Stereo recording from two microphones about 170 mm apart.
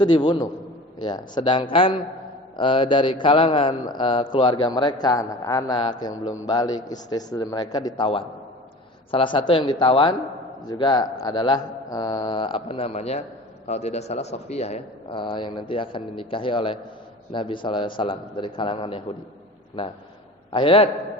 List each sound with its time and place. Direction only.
0.0 s a man's voice: 25° left (ahead or behind)
20.5 s a man's voice: 30° left (ahead or behind)